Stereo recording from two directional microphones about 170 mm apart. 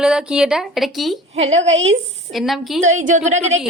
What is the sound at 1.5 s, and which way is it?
Speech, 90° right.